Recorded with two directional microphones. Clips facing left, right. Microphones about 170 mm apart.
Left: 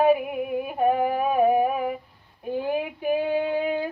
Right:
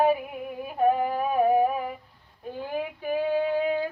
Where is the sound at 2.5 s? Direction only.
15° left (ahead or behind).